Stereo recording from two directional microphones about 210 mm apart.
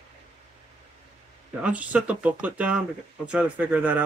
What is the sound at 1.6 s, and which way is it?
Speech, 5° right (ahead or behind).